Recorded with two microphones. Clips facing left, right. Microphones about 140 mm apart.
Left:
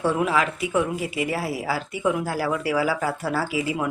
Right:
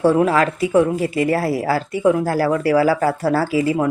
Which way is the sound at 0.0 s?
40° right (ahead or behind).